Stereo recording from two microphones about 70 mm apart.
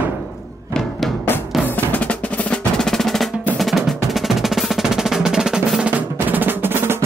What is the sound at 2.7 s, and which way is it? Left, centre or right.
Percussion, centre.